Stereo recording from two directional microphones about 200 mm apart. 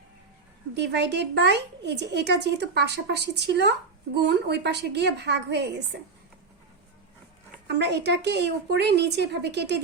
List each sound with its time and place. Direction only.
0.7 s speech: 55° right (ahead or behind)
7.7 s speech: 55° right (ahead or behind)